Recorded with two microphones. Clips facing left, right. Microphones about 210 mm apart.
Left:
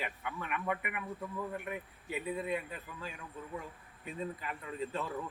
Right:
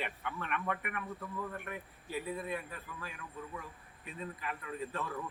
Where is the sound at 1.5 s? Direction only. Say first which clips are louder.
Left 3 dB; 20° left (ahead or behind).